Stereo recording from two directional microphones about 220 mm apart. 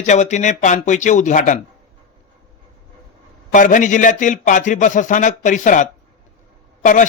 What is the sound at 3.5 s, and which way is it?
Speech, 35° left (ahead or behind).